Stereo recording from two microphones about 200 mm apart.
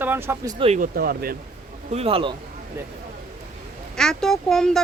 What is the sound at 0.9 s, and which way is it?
Speech, 50° right (ahead or behind).